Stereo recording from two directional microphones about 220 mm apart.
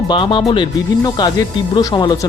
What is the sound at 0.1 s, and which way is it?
A man's voice, 20° left (ahead or behind).